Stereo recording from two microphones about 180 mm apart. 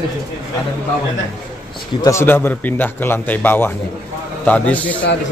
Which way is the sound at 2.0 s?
15° left (ahead or behind).